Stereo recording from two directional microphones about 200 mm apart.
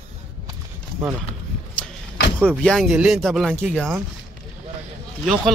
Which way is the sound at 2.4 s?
5° left (ahead or behind).